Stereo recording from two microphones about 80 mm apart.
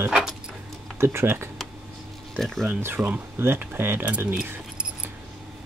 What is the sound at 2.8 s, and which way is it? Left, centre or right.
Speech, right.